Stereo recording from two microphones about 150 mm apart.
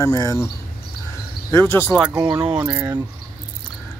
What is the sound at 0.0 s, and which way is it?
Speech, 20° left (ahead or behind).